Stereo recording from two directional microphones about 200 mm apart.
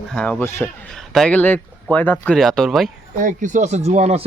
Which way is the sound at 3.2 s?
40° right (ahead or behind).